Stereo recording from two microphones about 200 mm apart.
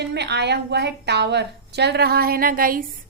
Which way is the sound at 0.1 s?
55° right (ahead or behind).